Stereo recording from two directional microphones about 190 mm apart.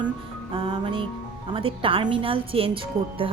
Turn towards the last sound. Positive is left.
turn(degrees=-30)  # may be behind; listen again after turning